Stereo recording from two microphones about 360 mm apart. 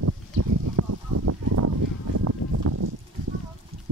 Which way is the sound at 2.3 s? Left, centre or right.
Right.